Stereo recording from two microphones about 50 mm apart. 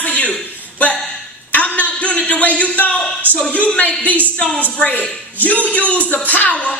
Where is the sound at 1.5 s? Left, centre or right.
Left.